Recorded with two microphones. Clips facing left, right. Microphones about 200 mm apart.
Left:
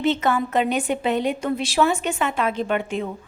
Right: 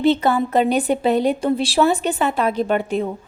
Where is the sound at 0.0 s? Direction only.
35° right (ahead or behind).